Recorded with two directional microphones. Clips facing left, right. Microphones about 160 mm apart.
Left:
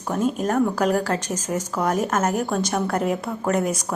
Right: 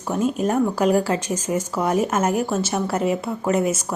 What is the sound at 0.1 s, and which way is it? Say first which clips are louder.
A woman's voice: right 1 dB; 5° right (ahead or behind).